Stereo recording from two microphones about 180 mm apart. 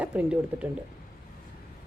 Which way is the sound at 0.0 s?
5° right (ahead or behind).